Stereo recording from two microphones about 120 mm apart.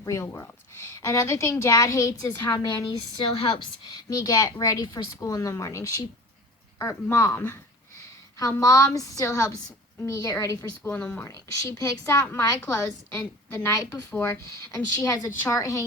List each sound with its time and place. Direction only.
0.0 s a woman's voice: 25° left (ahead or behind)
3.2 s a woman's voice: 40° left (ahead or behind); by 7.6 s 20° left (ahead or behind)
8.4 s a woman's voice: 30° left (ahead or behind)
10.9 s a woman's voice: 15° left (ahead or behind)